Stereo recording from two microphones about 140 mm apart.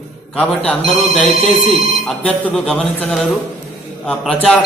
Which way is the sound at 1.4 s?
45° right (ahead or behind).